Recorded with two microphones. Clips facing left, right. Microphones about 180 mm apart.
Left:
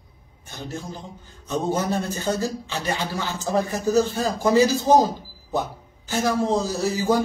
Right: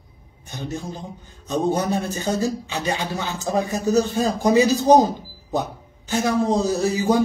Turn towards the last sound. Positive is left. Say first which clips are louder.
# right 2 dB
turn(degrees=-15)  # may be behind; listen again after turning